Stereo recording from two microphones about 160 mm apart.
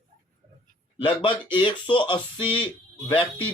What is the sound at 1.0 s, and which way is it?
Speech, 30° left (ahead or behind).